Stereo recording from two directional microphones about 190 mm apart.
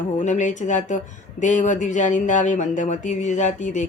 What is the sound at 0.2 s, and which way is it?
A woman's voice, 40° left (ahead or behind).